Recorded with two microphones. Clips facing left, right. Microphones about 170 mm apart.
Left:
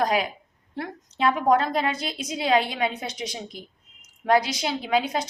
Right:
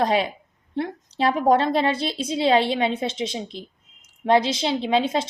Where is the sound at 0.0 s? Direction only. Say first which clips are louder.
Right 3 dB; 30° right (ahead or behind).